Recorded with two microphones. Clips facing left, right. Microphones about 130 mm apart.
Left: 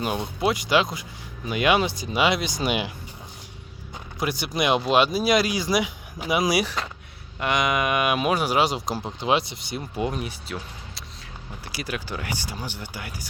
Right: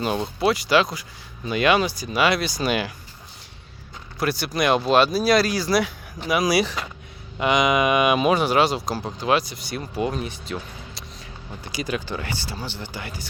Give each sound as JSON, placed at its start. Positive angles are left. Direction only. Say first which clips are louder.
{"t": 0.3, "sound": "speech", "louder": "right 2 dB", "side_deg": 15}
{"t": 4.2, "sound": "speech", "louder": "right 2 dB", "side_deg": 15}
{"t": 7.3, "sound": "speech", "louder": "right 4 dB", "side_deg": 0}